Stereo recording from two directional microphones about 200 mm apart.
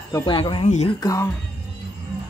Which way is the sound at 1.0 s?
15° left (ahead or behind).